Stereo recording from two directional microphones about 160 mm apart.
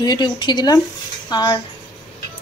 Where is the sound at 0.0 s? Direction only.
25° left (ahead or behind).